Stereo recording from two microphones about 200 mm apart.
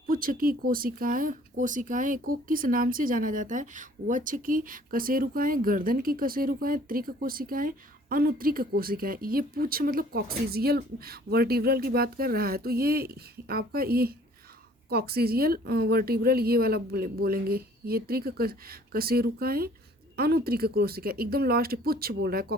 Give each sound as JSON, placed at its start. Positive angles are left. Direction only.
{"t": 0.1, "sound": "speech", "side_deg": -45}